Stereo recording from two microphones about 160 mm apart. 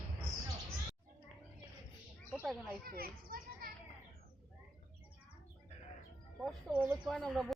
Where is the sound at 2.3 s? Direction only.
Centre (ahead or behind).